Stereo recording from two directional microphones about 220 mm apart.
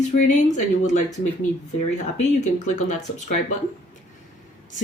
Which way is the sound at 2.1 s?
35° left (ahead or behind).